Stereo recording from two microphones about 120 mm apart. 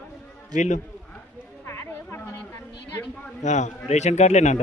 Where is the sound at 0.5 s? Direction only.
90° left.